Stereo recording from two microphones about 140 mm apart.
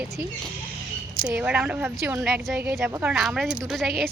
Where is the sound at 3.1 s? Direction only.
Centre (ahead or behind).